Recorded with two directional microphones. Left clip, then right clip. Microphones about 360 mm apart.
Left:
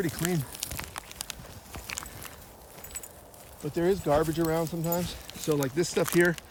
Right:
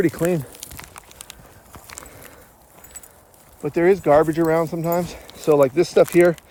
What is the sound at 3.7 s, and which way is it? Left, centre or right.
Speech, centre.